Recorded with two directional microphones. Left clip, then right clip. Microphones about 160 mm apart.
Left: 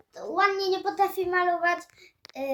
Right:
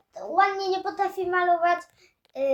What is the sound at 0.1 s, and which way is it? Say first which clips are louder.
A child's voice: right 2 dB; 10° right (ahead or behind).